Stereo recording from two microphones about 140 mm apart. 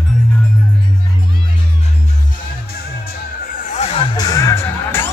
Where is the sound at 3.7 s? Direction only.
50° left (ahead or behind).